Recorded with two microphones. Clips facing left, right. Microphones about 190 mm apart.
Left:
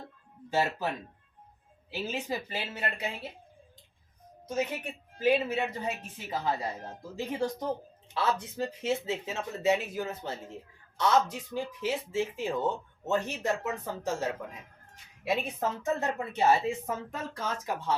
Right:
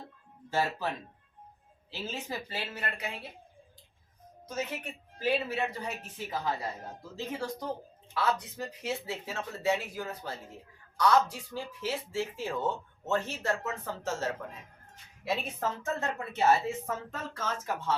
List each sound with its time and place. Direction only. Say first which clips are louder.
0.5 s speech: left 2 dB; 15° left (ahead or behind)
1.9 s speech: left 4 dB; 15° left (ahead or behind)
4.4 s speech: left 4 dB; 25° left (ahead or behind)
8.1 s speech: left 1 dB; 25° left (ahead or behind)